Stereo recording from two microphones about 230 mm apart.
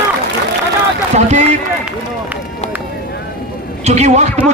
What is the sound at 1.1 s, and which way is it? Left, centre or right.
Speech, right.